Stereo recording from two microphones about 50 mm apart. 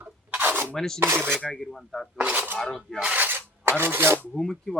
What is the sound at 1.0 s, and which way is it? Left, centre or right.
Speech, right.